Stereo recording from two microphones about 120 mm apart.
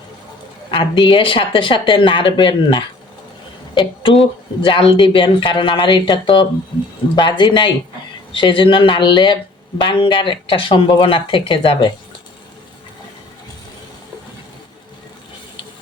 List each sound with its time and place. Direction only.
0.7 s speech: 45° left (ahead or behind)